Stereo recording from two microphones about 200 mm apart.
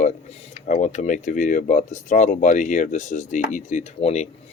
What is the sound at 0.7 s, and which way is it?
Speech, 35° left (ahead or behind).